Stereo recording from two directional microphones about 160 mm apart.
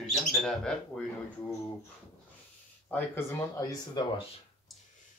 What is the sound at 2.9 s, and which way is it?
Speech, 15° left (ahead or behind).